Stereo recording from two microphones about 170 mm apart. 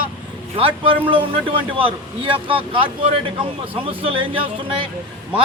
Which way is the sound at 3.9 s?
30° right (ahead or behind).